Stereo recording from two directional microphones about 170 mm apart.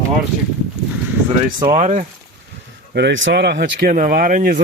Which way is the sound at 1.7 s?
45° right (ahead or behind).